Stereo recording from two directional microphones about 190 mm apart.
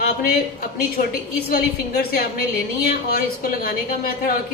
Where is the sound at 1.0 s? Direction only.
40° left (ahead or behind).